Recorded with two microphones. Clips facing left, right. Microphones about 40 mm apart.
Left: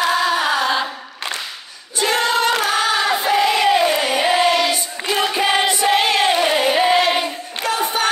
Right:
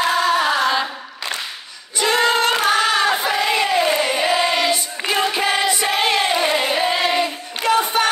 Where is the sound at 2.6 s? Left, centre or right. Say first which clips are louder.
Right 1 dB; right.